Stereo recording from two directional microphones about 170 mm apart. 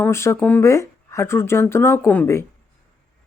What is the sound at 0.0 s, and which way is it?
A woman's voice, 15° left (ahead or behind).